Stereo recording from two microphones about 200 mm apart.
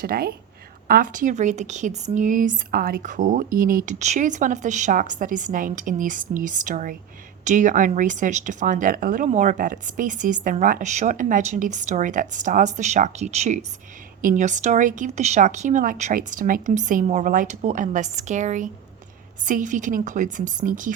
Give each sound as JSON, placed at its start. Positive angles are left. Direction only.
{"t": 0.0, "sound": "a woman's voice", "side_deg": -50}